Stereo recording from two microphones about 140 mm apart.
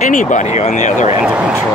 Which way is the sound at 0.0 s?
65° left (ahead or behind).